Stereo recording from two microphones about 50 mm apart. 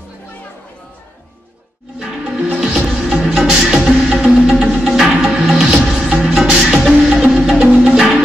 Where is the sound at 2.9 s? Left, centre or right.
Centre.